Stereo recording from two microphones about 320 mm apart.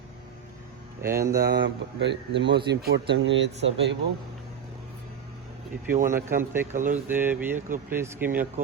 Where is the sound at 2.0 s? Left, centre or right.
Right.